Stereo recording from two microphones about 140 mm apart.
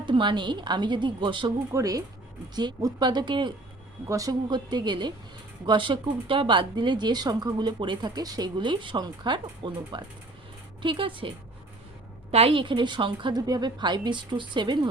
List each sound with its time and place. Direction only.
0.0 s speech: 35° right (ahead or behind)
4.0 s speech: 25° right (ahead or behind)
12.3 s speech: 45° right (ahead or behind)